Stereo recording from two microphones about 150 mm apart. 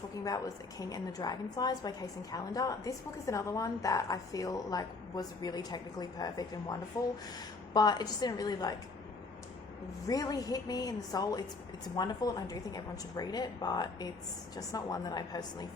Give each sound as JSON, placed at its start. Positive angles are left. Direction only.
{"t": 0.3, "sound": "a woman's voice", "side_deg": 25}
{"t": 10.1, "sound": "a woman's voice", "side_deg": 25}